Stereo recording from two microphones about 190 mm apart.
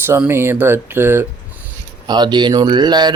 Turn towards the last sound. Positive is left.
turn(degrees=-20)  # may be behind; listen again after turning